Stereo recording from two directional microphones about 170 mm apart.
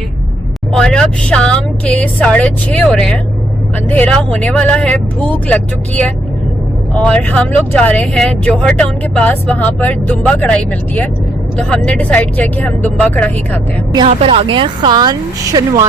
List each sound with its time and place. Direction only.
0.7 s a woman's voice: 5° left (ahead or behind)
14.0 s a woman's voice: 35° right (ahead or behind)